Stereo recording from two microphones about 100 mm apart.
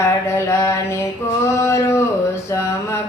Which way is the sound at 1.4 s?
30° left (ahead or behind).